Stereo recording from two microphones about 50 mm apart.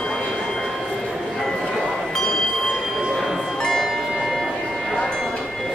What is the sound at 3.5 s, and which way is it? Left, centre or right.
Music, centre.